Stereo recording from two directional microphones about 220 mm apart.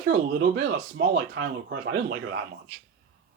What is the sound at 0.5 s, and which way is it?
Speech, 50° right (ahead or behind).